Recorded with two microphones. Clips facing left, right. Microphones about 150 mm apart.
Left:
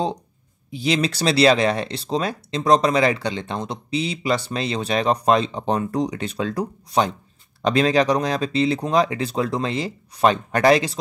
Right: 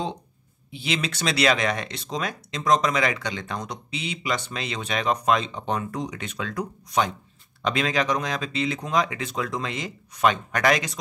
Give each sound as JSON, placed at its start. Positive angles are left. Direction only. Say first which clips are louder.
{"t": 0.7, "sound": "speech", "louder": "left 7 dB", "side_deg": 40}